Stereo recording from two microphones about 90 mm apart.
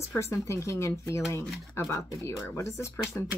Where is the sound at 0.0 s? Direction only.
30° left (ahead or behind).